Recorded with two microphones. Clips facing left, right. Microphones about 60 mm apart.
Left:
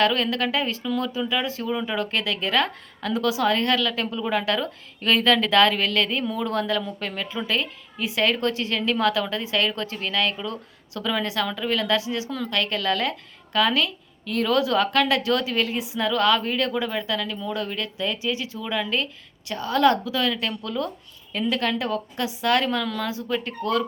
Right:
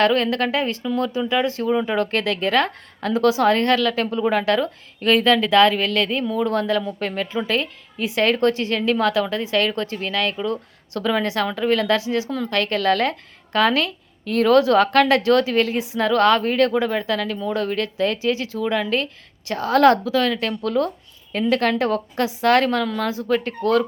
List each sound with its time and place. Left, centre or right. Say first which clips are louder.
0.0 s speech: right 4 dB; right
19.5 s a woman's voice: right 5 dB; right
20.1 s a woman's voice: right 5 dB; right
22.8 s speech: right 4 dB; right